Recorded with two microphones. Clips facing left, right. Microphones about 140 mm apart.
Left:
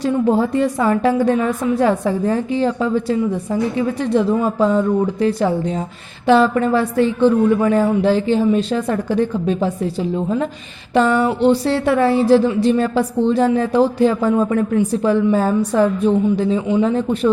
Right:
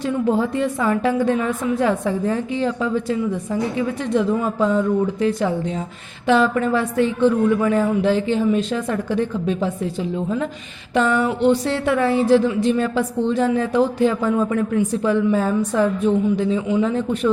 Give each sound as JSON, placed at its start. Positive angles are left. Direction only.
{"t": 0.0, "sound": "speech", "side_deg": 40}